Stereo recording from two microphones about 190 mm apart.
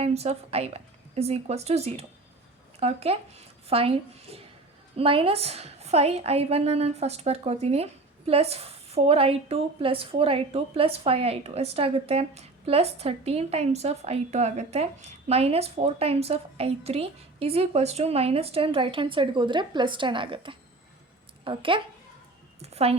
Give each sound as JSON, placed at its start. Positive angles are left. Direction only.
{"t": 0.0, "sound": "a woman's voice", "side_deg": -35}